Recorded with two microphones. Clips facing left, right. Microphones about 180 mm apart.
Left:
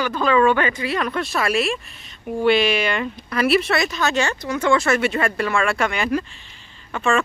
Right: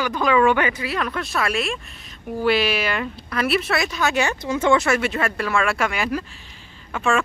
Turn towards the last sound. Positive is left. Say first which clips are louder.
# left 1 dB
turn(degrees=-5)  # may be behind; listen again after turning